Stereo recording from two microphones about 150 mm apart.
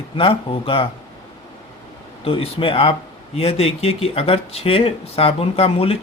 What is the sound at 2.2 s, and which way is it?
Speech, 40° left (ahead or behind).